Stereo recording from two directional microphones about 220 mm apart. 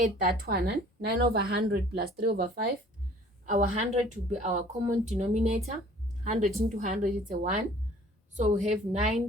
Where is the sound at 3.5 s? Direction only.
35° right (ahead or behind).